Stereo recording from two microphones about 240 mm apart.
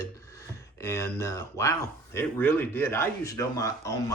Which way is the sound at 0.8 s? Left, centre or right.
Centre.